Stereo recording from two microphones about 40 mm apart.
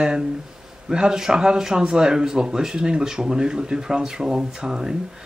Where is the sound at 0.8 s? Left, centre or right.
Centre.